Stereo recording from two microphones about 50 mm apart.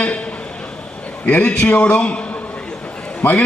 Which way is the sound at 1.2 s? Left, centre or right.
Left.